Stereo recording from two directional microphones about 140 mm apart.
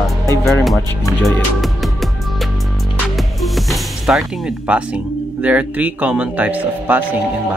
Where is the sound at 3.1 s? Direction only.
Centre (ahead or behind).